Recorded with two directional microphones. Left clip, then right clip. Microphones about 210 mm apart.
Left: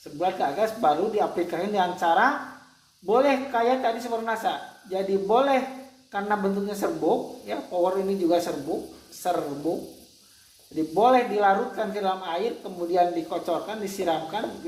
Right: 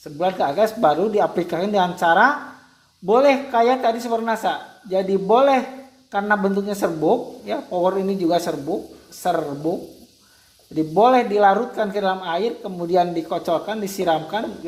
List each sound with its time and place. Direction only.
0.2 s speech: 45° right (ahead or behind)
10.8 s speech: 40° right (ahead or behind)